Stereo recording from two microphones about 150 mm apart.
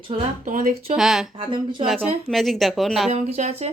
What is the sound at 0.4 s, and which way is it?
Speech, 65° right (ahead or behind).